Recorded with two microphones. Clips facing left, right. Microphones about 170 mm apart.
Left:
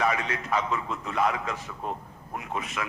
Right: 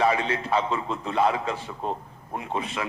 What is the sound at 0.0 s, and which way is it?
A man's voice, 30° right (ahead or behind).